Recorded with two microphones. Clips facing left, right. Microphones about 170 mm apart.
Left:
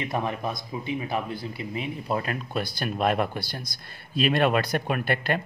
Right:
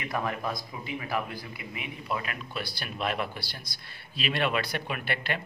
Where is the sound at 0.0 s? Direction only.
25° left (ahead or behind); by 5.4 s 45° left (ahead or behind).